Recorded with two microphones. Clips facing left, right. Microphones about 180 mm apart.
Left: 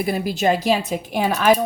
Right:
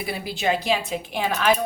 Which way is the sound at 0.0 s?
45° left (ahead or behind).